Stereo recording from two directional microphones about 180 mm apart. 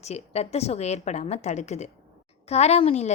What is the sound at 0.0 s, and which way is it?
A woman's voice, 35° left (ahead or behind).